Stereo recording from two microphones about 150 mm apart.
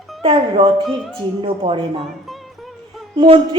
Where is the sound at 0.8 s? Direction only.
Centre (ahead or behind).